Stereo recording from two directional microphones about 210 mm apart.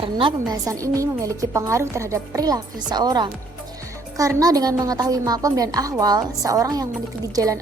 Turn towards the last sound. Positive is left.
turn(degrees=-15)  # may be behind; listen again after turning